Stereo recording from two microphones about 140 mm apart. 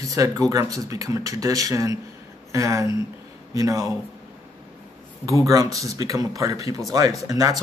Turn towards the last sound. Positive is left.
turn(degrees=-25)  # may be behind; listen again after turning